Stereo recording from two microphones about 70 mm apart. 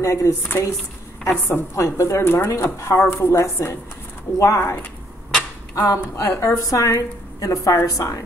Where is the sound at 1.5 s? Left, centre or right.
Left.